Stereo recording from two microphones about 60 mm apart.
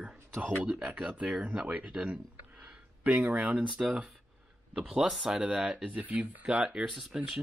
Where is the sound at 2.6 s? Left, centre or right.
Right; by 5.4 s centre.